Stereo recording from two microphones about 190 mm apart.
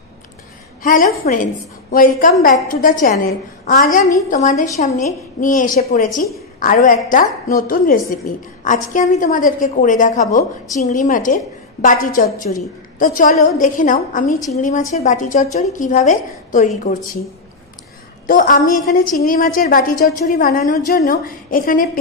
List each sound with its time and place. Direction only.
0.8 s a woman's voice: 45° left (ahead or behind)
18.2 s a woman's voice: 45° left (ahead or behind)